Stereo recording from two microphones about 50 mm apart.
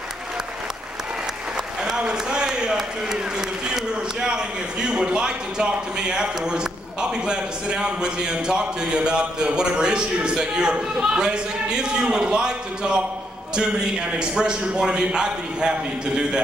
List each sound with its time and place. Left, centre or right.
2.0 s a man's voice: centre